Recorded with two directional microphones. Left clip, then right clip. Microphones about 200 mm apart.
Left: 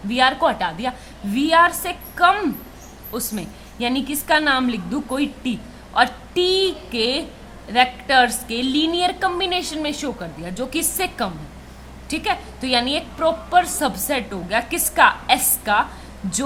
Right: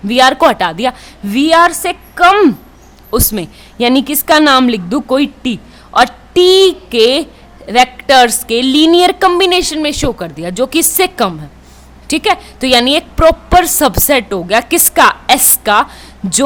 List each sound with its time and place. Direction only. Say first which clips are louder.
0.1 s a woman's voice: right 9 dB; 50° right (ahead or behind)